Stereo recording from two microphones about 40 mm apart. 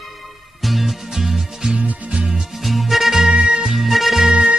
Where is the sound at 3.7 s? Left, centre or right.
Centre.